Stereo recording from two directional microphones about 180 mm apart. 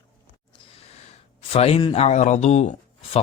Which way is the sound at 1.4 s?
35° left (ahead or behind).